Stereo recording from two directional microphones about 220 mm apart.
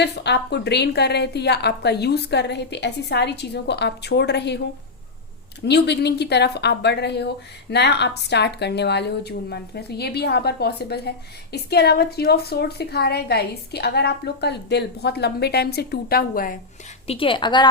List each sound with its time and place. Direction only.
0.0 s a woman's voice: 50° left (ahead or behind)
5.6 s a woman's voice: 50° left (ahead or behind)
17.1 s a woman's voice: 25° left (ahead or behind)